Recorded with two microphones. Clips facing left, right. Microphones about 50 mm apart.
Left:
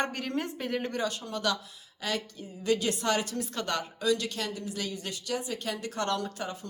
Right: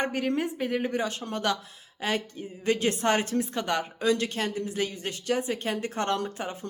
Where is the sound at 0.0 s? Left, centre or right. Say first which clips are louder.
Right 4 dB; centre.